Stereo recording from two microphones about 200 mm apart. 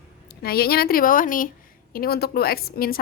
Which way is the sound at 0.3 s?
50° left (ahead or behind).